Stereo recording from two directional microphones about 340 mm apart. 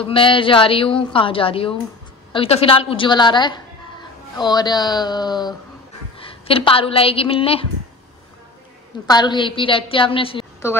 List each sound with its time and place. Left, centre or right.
0.0 s a woman's voice: centre
9.0 s a woman's voice: centre